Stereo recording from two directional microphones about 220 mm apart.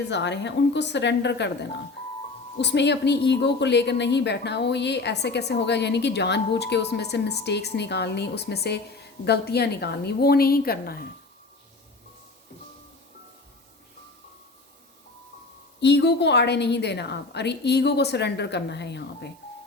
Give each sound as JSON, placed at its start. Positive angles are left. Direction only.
{"t": 0.1, "sound": "a woman's voice", "side_deg": 55}
{"t": 2.6, "sound": "a woman's voice", "side_deg": 50}
{"t": 15.8, "sound": "a woman's voice", "side_deg": 50}